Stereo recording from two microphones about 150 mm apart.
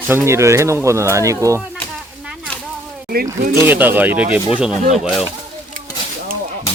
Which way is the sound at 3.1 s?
90° right.